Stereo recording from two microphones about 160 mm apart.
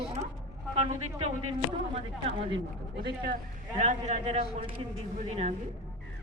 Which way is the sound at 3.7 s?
45° right (ahead or behind).